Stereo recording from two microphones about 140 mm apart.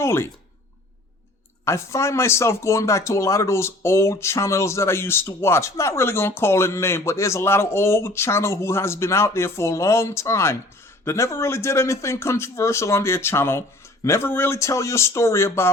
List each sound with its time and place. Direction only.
0.0 s speech: 20° left (ahead or behind)
1.6 s speech: 20° left (ahead or behind)